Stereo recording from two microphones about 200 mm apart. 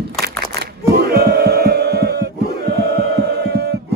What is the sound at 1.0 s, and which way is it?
Music, 50° right (ahead or behind).